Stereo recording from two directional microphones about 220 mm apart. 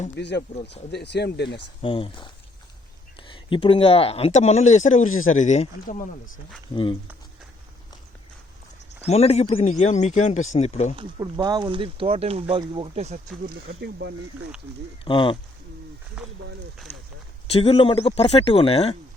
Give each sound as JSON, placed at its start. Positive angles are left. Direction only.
{"t": 0.2, "sound": "speech", "side_deg": 50}
{"t": 1.8, "sound": "speech", "side_deg": 25}
{"t": 9.0, "sound": "speech", "side_deg": 30}
{"t": 10.9, "sound": "speech", "side_deg": -20}
{"t": 13.5, "sound": "speech", "side_deg": -45}
{"t": 15.0, "sound": "speech", "side_deg": 25}
{"t": 17.5, "sound": "speech", "side_deg": 25}